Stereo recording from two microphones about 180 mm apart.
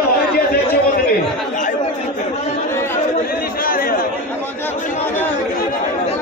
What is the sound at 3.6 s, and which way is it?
Chatter, 50° left (ahead or behind).